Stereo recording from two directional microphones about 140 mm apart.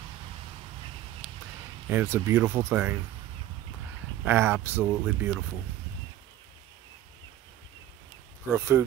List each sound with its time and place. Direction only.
1.2 s a sound: centre (ahead or behind)
1.9 s speech: 20° right (ahead or behind)
4.2 s speech: 15° right (ahead or behind)
8.5 s speech: 20° right (ahead or behind)